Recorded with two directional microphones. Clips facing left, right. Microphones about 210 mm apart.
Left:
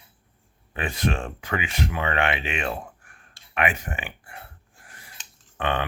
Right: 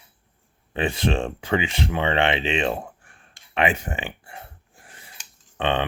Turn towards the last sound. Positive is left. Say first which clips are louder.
# right 3 dB
turn(degrees=-25)  # may be behind; listen again after turning